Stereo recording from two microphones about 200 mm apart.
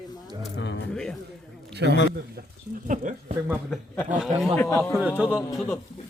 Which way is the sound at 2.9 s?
40° right (ahead or behind).